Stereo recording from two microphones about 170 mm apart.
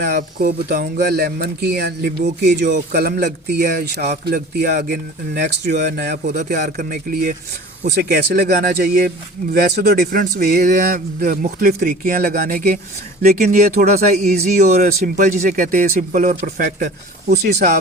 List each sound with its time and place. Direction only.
0.0 s speech: 60° right (ahead or behind)
17.2 s speech: 75° right (ahead or behind)